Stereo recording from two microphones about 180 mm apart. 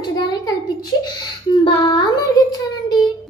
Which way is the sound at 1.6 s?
25° left (ahead or behind).